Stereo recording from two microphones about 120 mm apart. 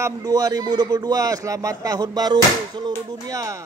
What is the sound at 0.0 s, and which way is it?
A man's voice, 30° right (ahead or behind).